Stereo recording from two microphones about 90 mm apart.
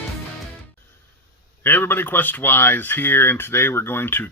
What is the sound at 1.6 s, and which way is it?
Speech, 25° left (ahead or behind).